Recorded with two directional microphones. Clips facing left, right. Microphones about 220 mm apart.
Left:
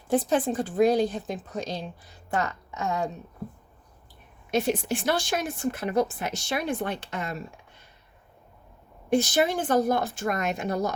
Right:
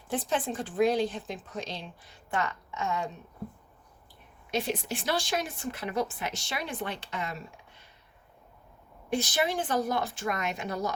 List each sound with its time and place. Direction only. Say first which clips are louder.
0.1 s speech: left 7 dB; 40° left (ahead or behind)
4.5 s a woman's voice: left 6 dB; 50° left (ahead or behind)
9.0 s a woman's voice: left 6 dB; 45° left (ahead or behind)